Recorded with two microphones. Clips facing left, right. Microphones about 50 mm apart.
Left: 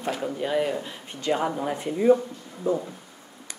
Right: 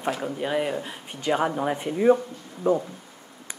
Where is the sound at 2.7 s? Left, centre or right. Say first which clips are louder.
Right 3 dB; right.